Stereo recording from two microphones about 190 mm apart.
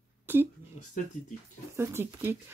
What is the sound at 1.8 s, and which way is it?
Speech, 15° right (ahead or behind).